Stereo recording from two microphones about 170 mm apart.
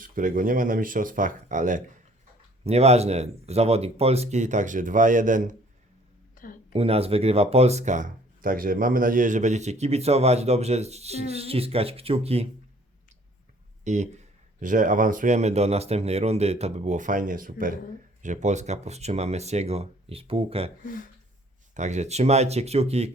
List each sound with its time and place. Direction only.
0.0 s speech: 55° right (ahead or behind)
2.6 s speech: 40° right (ahead or behind)
6.3 s a sound: 50° left (ahead or behind)
6.7 s speech: 35° right (ahead or behind)
13.8 s speech: 45° right (ahead or behind)
20.8 s speech: 55° left (ahead or behind)
21.8 s speech: 45° right (ahead or behind)